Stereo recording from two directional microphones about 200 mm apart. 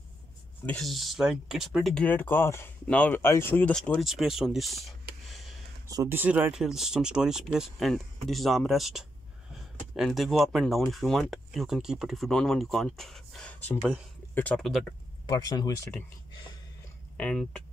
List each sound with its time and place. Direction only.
0.7 s speech: centre (ahead or behind)
5.9 s speech: 15° right (ahead or behind); by 13.7 s 5° left (ahead or behind)
13.7 s speech: 5° right (ahead or behind)
15.2 s speech: 20° left (ahead or behind)
17.2 s speech: 5° left (ahead or behind)